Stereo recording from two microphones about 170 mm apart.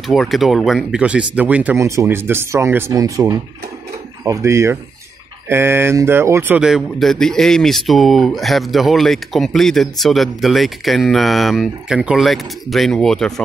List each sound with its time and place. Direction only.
0.0 s speech: centre (ahead or behind)